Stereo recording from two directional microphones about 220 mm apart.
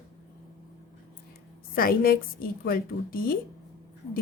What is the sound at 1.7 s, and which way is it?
A woman's voice, 40° left (ahead or behind).